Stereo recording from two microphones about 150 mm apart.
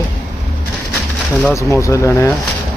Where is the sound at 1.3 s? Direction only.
5° left (ahead or behind).